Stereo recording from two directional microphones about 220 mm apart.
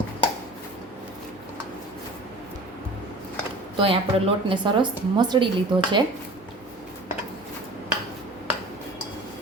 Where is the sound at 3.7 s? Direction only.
25° right (ahead or behind).